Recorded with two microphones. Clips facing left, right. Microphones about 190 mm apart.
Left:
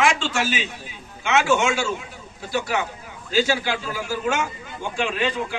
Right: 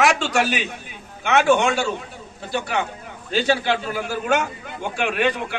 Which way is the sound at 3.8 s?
55° right (ahead or behind).